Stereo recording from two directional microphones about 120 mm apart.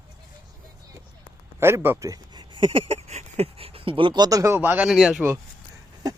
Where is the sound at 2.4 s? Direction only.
40° right (ahead or behind); by 4.9 s 15° right (ahead or behind).